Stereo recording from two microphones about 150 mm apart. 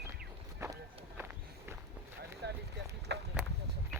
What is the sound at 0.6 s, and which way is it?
Run, 15° right (ahead or behind).